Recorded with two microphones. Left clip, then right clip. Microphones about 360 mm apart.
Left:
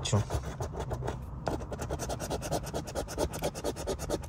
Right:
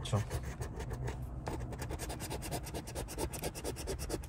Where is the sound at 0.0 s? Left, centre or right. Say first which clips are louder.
Left 6 dB; centre.